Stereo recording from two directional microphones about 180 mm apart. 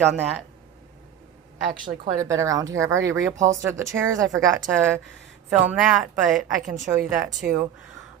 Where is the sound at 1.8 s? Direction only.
15° right (ahead or behind).